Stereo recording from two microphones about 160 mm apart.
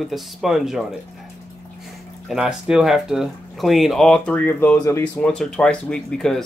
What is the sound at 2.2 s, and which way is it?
Speech, 5° right (ahead or behind).